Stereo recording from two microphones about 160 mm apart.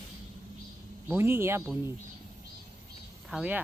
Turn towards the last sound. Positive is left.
turn(degrees=-5)  # may be behind; listen again after turning